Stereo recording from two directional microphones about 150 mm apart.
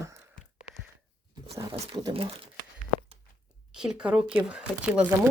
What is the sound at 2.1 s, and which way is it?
Speech, 40° right (ahead or behind).